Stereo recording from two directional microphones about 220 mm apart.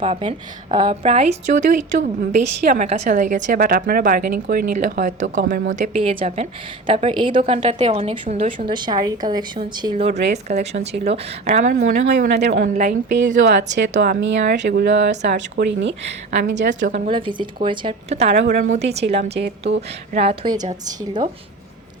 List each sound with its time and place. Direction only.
0.0 s a woman's voice: 25° right (ahead or behind)
8.7 s a woman's voice: 20° right (ahead or behind)
9.9 s a woman's voice: 30° right (ahead or behind)
12.0 s speech: 50° right (ahead or behind)
12.6 s a woman's voice: 35° right (ahead or behind)
13.3 s speech: 55° right (ahead or behind)
13.9 s a woman's voice: 40° right (ahead or behind)
14.2 s speech: 55° right (ahead or behind)
16.0 s a woman's voice: 35° right (ahead or behind)
16.6 s speech: 50° right (ahead or behind)
16.9 s a woman's voice: 25° right (ahead or behind)